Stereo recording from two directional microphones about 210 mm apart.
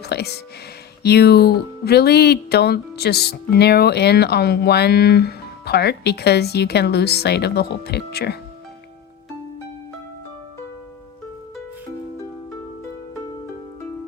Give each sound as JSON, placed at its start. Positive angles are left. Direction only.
{"t": 0.0, "sound": "speech", "side_deg": 50}